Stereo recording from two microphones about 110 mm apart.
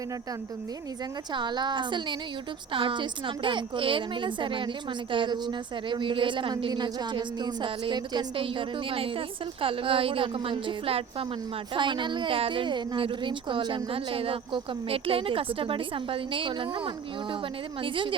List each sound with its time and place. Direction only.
1.3 s a woman's voice: 45° right (ahead or behind)
11.7 s a woman's voice: 45° right (ahead or behind)